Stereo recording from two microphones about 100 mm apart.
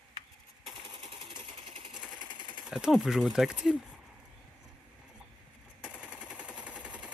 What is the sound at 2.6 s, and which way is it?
Speech, 5° right (ahead or behind).